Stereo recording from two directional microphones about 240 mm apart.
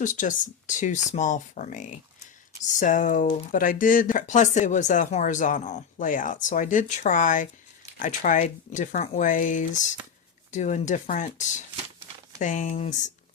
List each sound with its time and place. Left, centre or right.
0.0 s speech: left